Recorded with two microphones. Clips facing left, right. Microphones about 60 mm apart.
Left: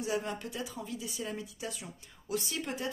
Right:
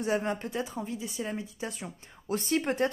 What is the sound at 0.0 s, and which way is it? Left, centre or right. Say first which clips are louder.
Speech: right 5 dB; right.